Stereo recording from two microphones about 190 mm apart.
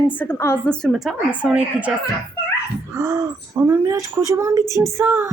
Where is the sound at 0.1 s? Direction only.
10° left (ahead or behind); by 1.9 s 5° right (ahead or behind).